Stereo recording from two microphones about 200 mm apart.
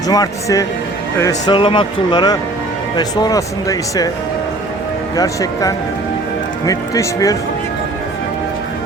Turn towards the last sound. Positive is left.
turn(degrees=15)  # may be behind; listen again after turning